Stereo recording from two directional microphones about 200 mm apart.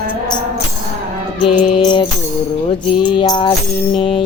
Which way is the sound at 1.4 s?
25° left (ahead or behind).